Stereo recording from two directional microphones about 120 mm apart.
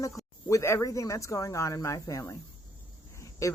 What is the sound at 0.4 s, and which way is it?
Speech, 25° left (ahead or behind).